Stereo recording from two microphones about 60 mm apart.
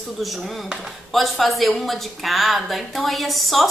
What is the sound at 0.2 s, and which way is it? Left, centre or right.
A woman's voice, centre.